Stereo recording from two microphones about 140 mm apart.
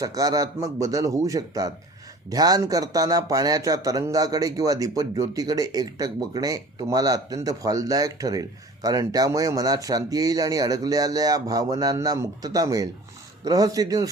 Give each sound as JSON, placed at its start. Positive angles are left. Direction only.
{"t": 0.0, "sound": "speech", "side_deg": -25}